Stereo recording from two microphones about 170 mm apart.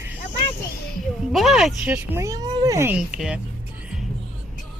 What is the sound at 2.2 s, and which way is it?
Speech, 20° right (ahead or behind).